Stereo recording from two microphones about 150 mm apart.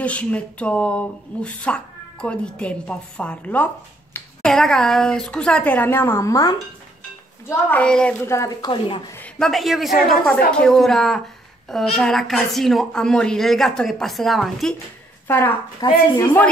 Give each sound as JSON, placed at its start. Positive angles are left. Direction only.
{"t": 0.0, "sound": "speech", "side_deg": 10}
{"t": 7.4, "sound": "speech", "side_deg": 10}
{"t": 8.3, "sound": "speech", "side_deg": 20}
{"t": 9.4, "sound": "a woman's voice", "side_deg": 0}
{"t": 15.2, "sound": "a woman's voice", "side_deg": 15}
{"t": 15.8, "sound": "speech", "side_deg": 25}